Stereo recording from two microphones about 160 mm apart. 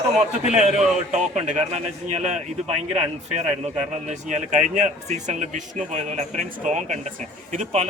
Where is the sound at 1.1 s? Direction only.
45° right (ahead or behind).